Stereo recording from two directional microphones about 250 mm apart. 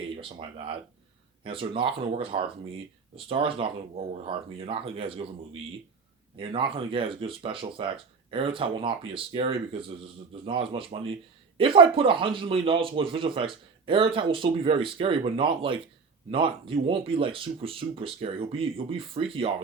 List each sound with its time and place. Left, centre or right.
0.2 s speech: centre
6.3 s speech: right